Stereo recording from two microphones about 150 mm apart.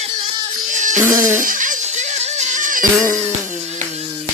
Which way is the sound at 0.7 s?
55° right (ahead or behind).